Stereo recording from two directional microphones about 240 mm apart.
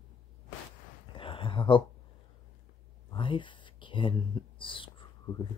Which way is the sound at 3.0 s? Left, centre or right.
Left.